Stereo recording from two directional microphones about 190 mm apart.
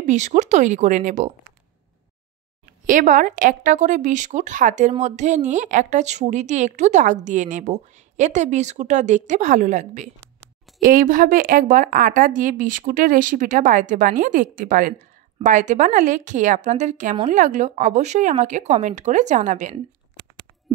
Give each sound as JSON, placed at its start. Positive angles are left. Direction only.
{"t": 0.0, "sound": "speech", "side_deg": -40}
{"t": 2.9, "sound": "a woman's voice", "side_deg": -45}